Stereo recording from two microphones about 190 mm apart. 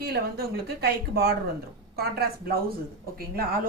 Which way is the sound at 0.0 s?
55° right (ahead or behind).